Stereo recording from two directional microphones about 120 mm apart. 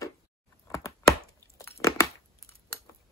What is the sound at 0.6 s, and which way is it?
Chopping, 25° left (ahead or behind).